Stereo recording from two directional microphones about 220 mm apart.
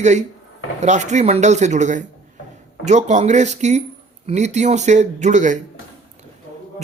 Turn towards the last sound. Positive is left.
turn(degrees=-35)  # may be behind; listen again after turning